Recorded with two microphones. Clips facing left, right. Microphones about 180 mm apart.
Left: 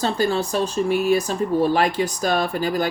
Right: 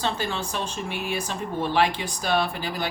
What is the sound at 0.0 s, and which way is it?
Speech, 40° left (ahead or behind).